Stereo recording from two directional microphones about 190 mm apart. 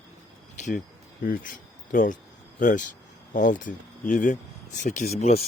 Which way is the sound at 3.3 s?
45° left (ahead or behind).